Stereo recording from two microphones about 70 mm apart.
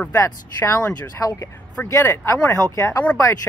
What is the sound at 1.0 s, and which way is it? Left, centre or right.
Speech, left.